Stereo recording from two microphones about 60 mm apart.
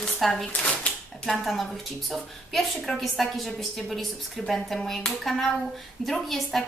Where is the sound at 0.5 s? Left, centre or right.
Centre.